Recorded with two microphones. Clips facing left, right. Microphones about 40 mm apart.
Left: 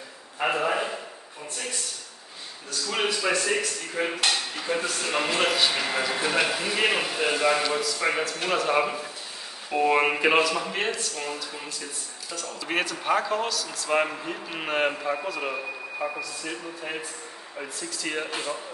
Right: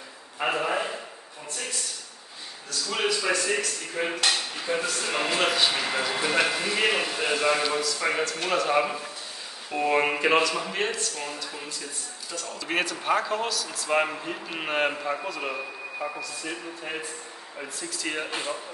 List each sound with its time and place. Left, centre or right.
0.4 s speech: centre
2.9 s a man's voice: centre
3.2 s speech: centre